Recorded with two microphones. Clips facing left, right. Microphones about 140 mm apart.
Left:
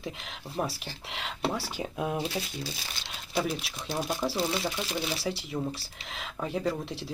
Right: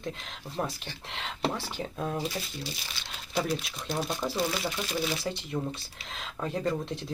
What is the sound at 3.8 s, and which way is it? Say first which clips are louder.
Speech: left 3 dB; 10° left (ahead or behind).